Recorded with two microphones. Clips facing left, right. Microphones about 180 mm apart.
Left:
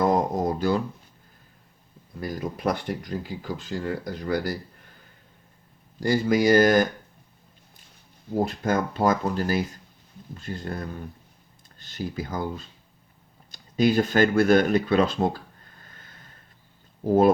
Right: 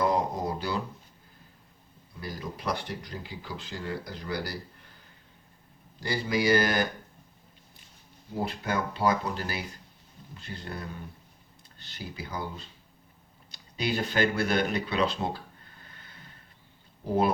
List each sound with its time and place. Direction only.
0.0 s a sound: 45° left (ahead or behind)
2.2 s speech: 50° left (ahead or behind)
6.0 s speech: 45° left (ahead or behind)
8.4 s speech: 45° left (ahead or behind)
11.8 s speech: 45° left (ahead or behind)
17.1 s speech: 45° left (ahead or behind)